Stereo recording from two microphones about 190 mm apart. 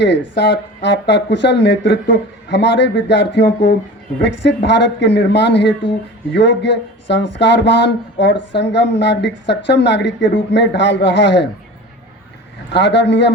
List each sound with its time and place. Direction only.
0.0 s speech: 65° left (ahead or behind)
12.7 s speech: 65° left (ahead or behind)